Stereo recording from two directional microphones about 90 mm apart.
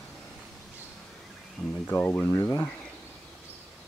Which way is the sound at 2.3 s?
30° left (ahead or behind).